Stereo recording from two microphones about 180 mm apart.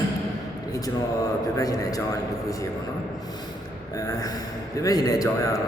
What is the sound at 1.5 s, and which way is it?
Speech, 20° left (ahead or behind).